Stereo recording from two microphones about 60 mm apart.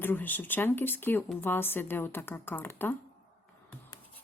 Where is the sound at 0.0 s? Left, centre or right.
Left.